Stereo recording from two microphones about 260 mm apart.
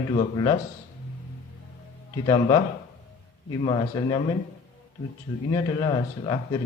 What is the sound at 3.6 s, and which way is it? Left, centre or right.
Speech, centre.